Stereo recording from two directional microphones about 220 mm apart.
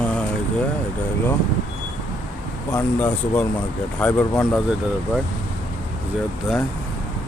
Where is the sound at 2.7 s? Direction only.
5° left (ahead or behind).